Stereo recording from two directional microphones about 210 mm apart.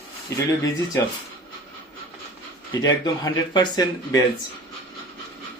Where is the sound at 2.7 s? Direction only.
20° left (ahead or behind).